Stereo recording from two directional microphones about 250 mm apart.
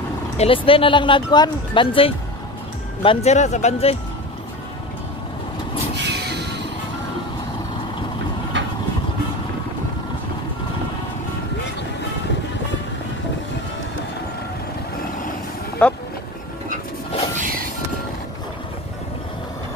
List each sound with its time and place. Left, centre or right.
0.4 s speech: left
5.9 s vehicle: right
8.5 s vehicle: right
15.8 s speech: centre